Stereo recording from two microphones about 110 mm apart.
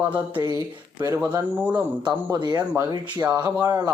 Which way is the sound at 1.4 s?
15° right (ahead or behind).